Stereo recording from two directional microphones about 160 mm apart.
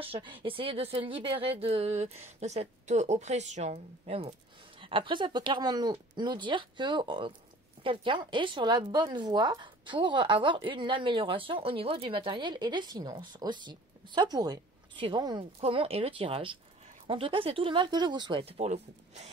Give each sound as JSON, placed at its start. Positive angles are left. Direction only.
{"t": 0.0, "sound": "speech", "side_deg": -35}